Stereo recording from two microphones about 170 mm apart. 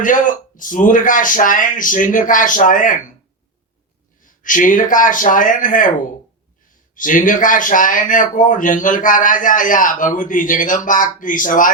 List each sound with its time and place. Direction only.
0.0 s speech: 50° left (ahead or behind)
4.2 s speech: 50° left (ahead or behind)
6.9 s speech: 50° left (ahead or behind)